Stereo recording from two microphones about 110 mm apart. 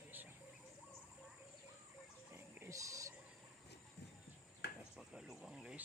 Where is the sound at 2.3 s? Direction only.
20° right (ahead or behind).